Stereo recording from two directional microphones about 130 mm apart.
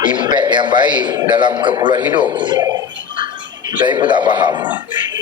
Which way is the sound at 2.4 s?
35° right (ahead or behind).